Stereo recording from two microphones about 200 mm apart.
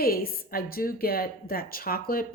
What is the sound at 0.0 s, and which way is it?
A woman's voice, 50° left (ahead or behind).